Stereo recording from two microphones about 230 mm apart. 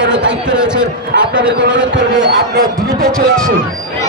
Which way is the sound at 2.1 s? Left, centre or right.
Right.